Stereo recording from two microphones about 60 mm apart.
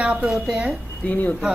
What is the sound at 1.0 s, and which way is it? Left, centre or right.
Speech, left.